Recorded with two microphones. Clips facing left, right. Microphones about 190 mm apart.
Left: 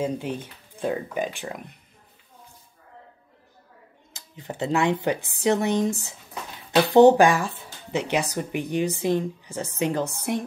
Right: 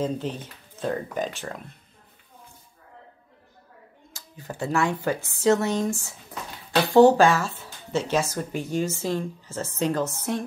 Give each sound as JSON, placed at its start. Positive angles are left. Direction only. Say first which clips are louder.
{"t": 0.3, "sound": "a woman's voice", "louder": "left 2 dB", "side_deg": 10}
{"t": 4.1, "sound": "a woman's voice", "louder": "left 2 dB", "side_deg": 20}